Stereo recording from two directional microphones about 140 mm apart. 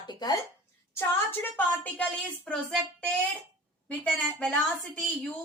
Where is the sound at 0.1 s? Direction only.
30° left (ahead or behind).